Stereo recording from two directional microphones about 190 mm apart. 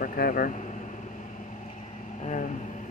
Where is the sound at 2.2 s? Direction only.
40° left (ahead or behind).